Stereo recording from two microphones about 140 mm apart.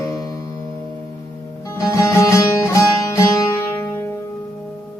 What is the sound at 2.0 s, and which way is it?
Music, 20° left (ahead or behind).